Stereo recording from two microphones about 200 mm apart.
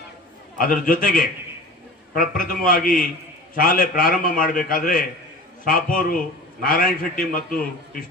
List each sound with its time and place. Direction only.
0.7 s a man's voice: 45° left (ahead or behind)